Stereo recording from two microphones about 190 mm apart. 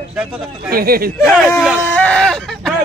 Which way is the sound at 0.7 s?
50° right (ahead or behind).